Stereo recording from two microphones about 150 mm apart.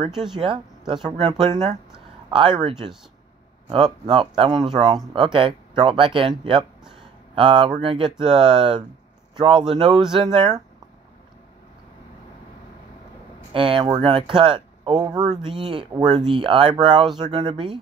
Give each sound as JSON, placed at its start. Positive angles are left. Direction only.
{"t": 0.3, "sound": "speech", "side_deg": -35}
{"t": 13.5, "sound": "speech", "side_deg": -35}